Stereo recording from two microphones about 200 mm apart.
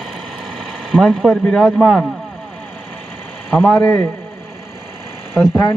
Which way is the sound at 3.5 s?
5° left (ahead or behind).